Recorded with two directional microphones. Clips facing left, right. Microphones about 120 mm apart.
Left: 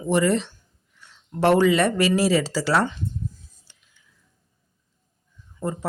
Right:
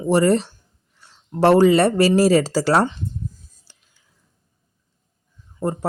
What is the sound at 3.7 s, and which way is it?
Whispering, 35° right (ahead or behind).